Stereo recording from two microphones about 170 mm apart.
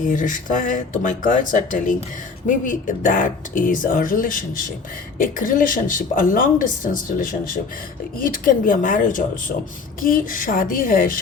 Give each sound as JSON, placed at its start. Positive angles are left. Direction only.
{"t": 0.0, "sound": "a woman's voice", "side_deg": 50}